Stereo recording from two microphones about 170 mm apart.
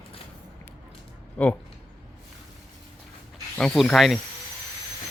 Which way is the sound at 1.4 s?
10° left (ahead or behind).